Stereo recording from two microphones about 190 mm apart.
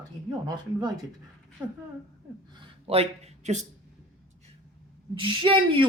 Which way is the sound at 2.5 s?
25° right (ahead or behind).